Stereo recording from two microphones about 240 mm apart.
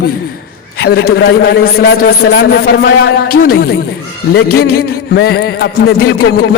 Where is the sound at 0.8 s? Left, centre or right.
Left.